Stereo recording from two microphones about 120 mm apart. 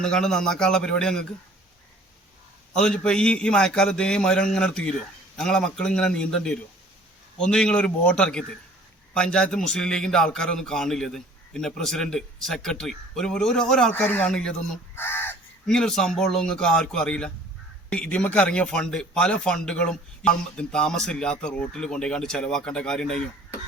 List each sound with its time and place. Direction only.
0.0 s a man's voice: 5° left (ahead or behind)
2.7 s a man's voice: 5° left (ahead or behind)
14.9 s crow: 20° left (ahead or behind)
15.6 s a man's voice: 5° left (ahead or behind)